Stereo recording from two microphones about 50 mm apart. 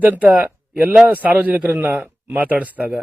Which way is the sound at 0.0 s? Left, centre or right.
Right.